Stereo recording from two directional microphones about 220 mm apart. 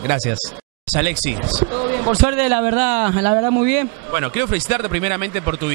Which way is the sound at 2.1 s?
10° right (ahead or behind).